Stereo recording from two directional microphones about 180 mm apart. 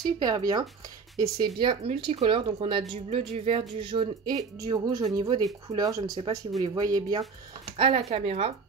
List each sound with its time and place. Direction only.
0.0 s speech: 20° right (ahead or behind)